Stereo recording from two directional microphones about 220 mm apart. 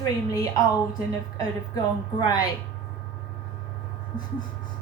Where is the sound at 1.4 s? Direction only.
15° left (ahead or behind).